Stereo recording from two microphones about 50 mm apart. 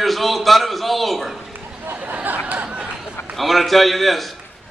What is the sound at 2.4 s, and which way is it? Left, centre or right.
Chatter, right.